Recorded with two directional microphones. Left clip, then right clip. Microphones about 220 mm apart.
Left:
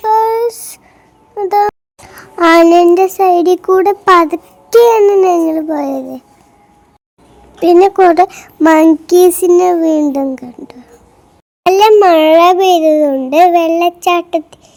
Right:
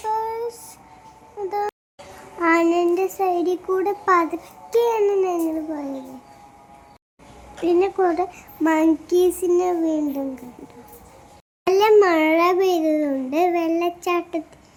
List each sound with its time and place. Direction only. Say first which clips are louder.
0.0 s a sound: left 14 dB; 45° left (ahead or behind)
2.1 s a child's voice: left 12 dB; 50° left (ahead or behind)
7.6 s a child's voice: left 12 dB; 50° left (ahead or behind)
11.7 s a child's voice: left 9 dB; 40° left (ahead or behind)